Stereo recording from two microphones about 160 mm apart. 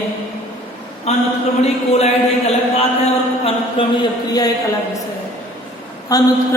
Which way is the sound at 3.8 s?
35° left (ahead or behind).